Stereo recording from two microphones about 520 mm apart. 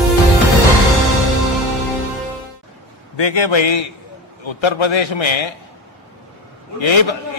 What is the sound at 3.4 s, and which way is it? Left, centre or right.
A man's voice, left.